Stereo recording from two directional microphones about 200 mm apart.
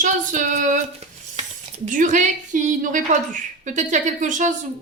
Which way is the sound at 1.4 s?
35° right (ahead or behind).